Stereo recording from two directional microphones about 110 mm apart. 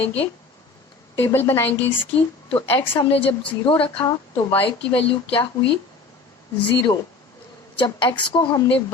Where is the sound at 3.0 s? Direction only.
60° left (ahead or behind).